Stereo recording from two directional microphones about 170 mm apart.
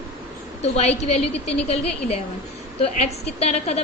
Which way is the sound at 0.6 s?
40° left (ahead or behind).